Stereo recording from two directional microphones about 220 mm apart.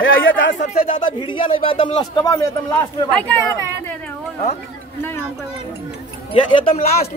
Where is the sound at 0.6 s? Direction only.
25° left (ahead or behind).